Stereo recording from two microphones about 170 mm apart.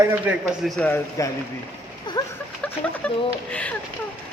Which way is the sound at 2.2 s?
20° left (ahead or behind).